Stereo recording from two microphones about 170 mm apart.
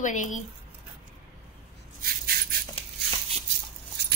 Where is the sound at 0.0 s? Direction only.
45° left (ahead or behind).